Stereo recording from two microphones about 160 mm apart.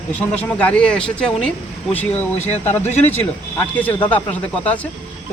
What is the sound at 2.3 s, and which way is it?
Speech, 45° left (ahead or behind).